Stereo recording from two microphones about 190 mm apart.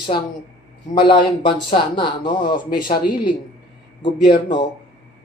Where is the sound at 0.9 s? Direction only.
25° left (ahead or behind).